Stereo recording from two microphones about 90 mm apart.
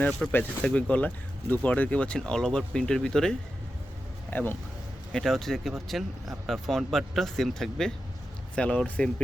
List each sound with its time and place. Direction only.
0.0 s speech: 20° left (ahead or behind)
4.3 s speech: 20° left (ahead or behind)
5.1 s speech: centre (ahead or behind)